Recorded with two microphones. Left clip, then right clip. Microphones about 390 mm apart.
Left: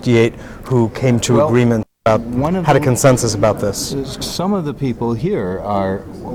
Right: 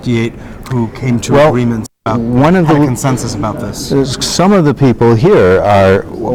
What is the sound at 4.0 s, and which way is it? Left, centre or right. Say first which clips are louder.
Speech: right 10 dB; right.